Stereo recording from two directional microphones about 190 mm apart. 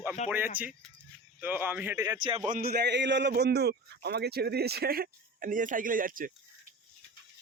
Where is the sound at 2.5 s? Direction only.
50° right (ahead or behind).